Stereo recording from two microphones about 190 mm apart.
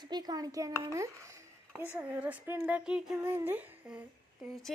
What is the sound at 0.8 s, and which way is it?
Speech, 15° right (ahead or behind).